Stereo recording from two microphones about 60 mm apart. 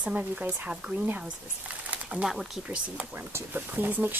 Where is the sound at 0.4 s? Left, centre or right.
Right.